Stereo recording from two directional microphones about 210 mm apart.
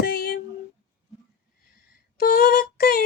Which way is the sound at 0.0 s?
45° left (ahead or behind).